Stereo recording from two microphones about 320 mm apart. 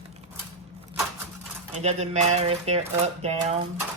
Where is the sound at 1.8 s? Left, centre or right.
Right.